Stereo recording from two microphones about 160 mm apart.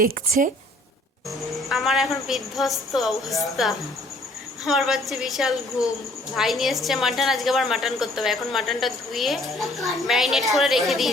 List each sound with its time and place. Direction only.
0.0 s a woman's voice: 55° right (ahead or behind)
1.7 s a woman's voice: centre (ahead or behind)